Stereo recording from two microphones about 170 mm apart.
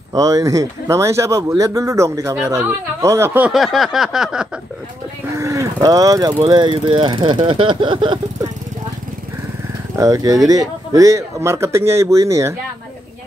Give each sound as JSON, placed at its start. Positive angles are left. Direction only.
{"t": 0.1, "sound": "a man's voice", "side_deg": -20}
{"t": 5.3, "sound": "a man's voice", "side_deg": -20}
{"t": 9.9, "sound": "a man's voice", "side_deg": -20}